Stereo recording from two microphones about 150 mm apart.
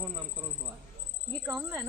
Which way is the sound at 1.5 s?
15° right (ahead or behind).